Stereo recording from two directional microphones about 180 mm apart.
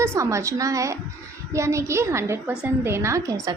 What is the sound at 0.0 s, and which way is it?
A woman's voice, 15° right (ahead or behind).